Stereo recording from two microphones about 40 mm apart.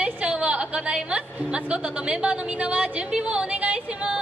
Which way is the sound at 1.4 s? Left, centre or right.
Right.